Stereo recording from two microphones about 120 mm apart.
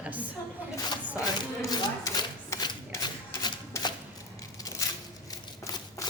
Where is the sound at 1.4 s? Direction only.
35° left (ahead or behind).